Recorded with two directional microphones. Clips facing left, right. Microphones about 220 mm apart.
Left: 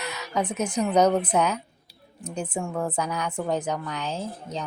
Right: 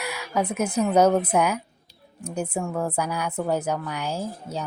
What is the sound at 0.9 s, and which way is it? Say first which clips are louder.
A woman's voice: right 1 dB; 5° right (ahead or behind).